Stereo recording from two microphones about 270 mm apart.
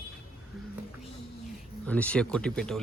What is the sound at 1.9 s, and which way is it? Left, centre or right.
Speech, centre.